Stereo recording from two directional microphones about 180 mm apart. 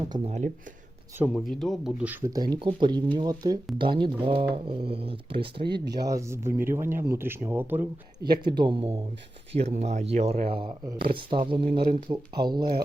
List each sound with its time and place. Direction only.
0.3 s speech: 40° right (ahead or behind)
1.2 s speech: centre (ahead or behind)
2.3 s speech: 20° right (ahead or behind)
5.5 s speech: 70° right (ahead or behind)
6.0 s speech: 20° right (ahead or behind)
8.3 s speech: 25° right (ahead or behind)